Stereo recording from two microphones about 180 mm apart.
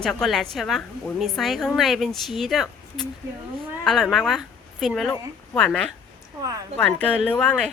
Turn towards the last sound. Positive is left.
turn(degrees=5)  # may be behind; listen again after turning